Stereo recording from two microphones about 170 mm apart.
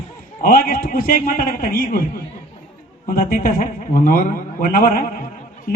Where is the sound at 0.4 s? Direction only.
55° left (ahead or behind).